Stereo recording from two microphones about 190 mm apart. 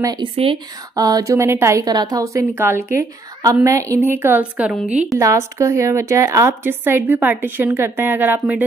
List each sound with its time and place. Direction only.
0.0 s a woman's voice: 25° right (ahead or behind)